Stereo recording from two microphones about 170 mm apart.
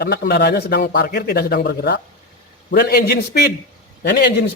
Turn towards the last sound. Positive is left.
turn(degrees=75)  # may be behind; listen again after turning